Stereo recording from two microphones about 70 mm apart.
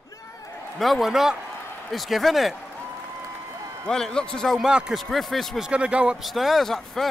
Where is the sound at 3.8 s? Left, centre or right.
Centre.